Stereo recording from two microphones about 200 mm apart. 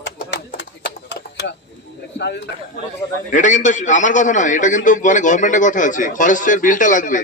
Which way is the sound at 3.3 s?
40° left (ahead or behind).